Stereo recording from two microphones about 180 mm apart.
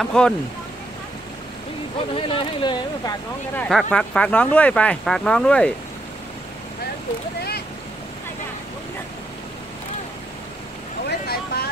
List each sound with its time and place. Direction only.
0.0 s speech: 5° left (ahead or behind)
2.1 s speech: 30° left (ahead or behind)
3.5 s speech: 5° left (ahead or behind)
11.1 s speech: 60° left (ahead or behind)